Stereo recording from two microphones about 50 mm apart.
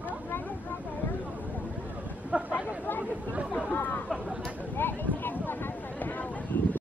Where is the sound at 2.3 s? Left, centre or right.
Right.